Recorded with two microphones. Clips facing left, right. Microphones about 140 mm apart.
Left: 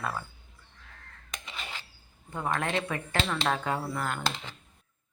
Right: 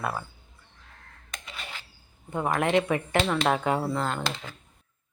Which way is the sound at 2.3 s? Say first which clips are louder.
Right 6 dB; 20° right (ahead or behind).